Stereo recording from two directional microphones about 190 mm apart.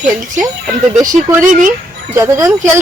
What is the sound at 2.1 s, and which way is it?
Speech, 15° right (ahead or behind).